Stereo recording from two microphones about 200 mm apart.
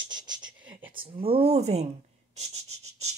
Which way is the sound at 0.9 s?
30° right (ahead or behind).